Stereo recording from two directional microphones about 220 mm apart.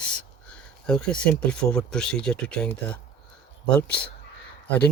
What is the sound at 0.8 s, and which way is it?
Speech, 5° left (ahead or behind).